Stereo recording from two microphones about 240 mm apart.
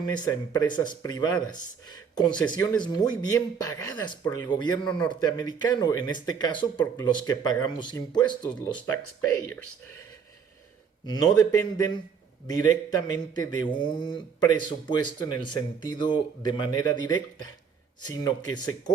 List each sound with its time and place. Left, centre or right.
0.0 s speech: centre
11.0 s speech: centre